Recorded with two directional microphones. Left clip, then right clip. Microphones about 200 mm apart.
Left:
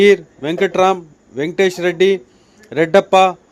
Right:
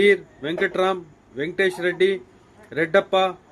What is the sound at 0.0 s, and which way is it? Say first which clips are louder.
A man's voice: left 6 dB; 35° left (ahead or behind).